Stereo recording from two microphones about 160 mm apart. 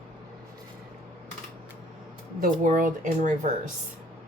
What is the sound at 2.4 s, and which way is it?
Speech, 55° right (ahead or behind).